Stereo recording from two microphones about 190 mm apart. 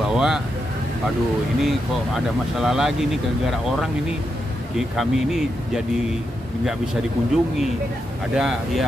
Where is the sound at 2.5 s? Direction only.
Centre (ahead or behind).